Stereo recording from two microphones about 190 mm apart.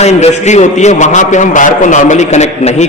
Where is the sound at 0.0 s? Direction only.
35° left (ahead or behind).